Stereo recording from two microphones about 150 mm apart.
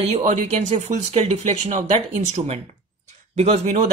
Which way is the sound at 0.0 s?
45° right (ahead or behind).